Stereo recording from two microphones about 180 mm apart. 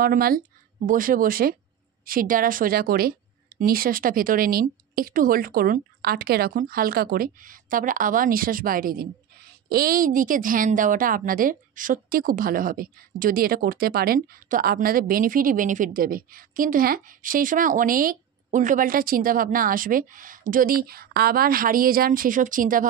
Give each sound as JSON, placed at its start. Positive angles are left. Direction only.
{"t": 0.0, "sound": "a woman's voice", "side_deg": -55}